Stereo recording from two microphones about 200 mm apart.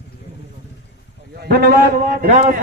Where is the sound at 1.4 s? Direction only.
50° right (ahead or behind).